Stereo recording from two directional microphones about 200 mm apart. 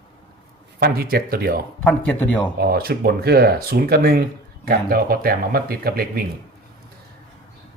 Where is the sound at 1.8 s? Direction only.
5° left (ahead or behind).